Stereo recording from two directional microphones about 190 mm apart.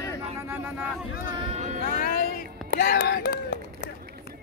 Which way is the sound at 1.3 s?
30° right (ahead or behind).